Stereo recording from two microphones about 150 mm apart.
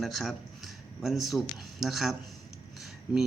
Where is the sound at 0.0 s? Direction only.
Centre (ahead or behind).